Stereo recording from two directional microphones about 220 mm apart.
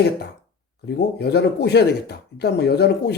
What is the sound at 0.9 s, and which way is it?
Speech, 50° left (ahead or behind).